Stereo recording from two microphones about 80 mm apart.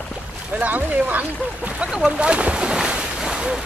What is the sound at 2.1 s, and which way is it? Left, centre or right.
Boat, centre.